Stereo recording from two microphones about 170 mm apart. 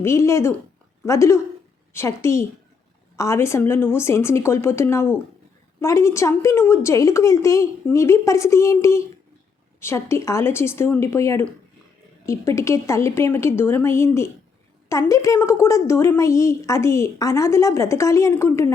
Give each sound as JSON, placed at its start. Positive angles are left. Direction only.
{"t": 0.0, "sound": "a woman's voice", "side_deg": 15}